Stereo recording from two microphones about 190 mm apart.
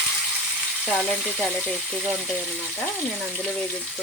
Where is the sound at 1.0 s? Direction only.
5° left (ahead or behind).